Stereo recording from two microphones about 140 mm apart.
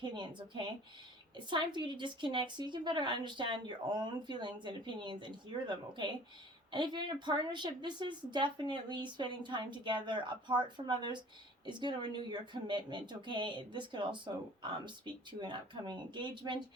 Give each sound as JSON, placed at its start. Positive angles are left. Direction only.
{"t": 0.0, "sound": "a woman's voice", "side_deg": -35}